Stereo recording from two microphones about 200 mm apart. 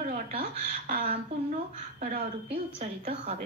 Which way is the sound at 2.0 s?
45° right (ahead or behind).